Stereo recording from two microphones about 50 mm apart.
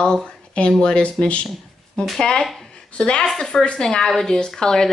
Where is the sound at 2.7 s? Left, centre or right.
Centre.